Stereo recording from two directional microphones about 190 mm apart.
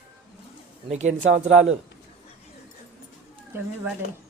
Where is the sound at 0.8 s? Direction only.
35° right (ahead or behind).